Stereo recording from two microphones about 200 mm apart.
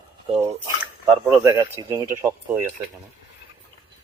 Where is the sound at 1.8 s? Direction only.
20° right (ahead or behind).